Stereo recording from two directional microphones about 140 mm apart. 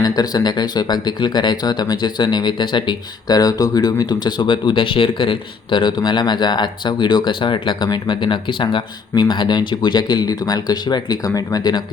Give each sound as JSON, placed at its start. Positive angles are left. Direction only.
{"t": 0.0, "sound": "speech", "side_deg": 30}